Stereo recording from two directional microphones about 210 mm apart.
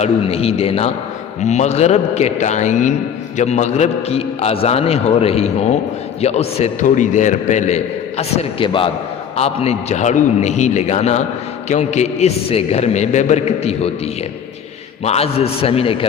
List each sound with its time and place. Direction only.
0.0 s a man's voice: 30° left (ahead or behind)
15.0 s a man's voice: 30° left (ahead or behind)